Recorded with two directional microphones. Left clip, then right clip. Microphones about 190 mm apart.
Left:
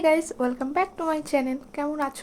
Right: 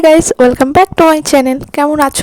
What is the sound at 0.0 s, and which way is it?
A woman's voice, 60° right (ahead or behind).